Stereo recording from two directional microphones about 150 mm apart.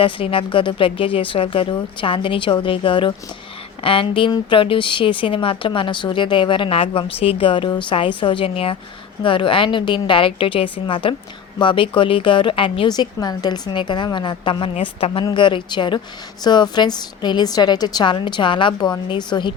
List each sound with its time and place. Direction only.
0.0 s speech: 35° left (ahead or behind)
15.2 s a woman's voice: 30° left (ahead or behind)